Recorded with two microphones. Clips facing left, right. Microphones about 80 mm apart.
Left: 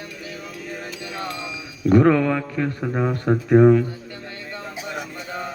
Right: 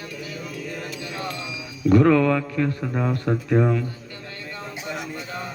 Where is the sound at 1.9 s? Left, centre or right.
Left.